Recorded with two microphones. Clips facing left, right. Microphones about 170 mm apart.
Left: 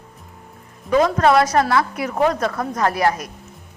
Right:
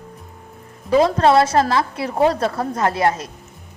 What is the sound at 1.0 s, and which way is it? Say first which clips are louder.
A woman's voice: even; 25° right (ahead or behind).